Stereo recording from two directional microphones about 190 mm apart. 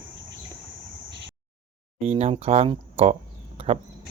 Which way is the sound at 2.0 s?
35° right (ahead or behind).